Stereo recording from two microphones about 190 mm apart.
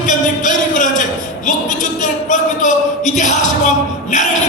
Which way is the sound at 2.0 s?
40° left (ahead or behind).